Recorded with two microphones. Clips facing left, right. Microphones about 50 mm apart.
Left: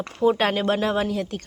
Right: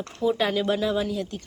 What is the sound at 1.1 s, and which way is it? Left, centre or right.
Speech, left.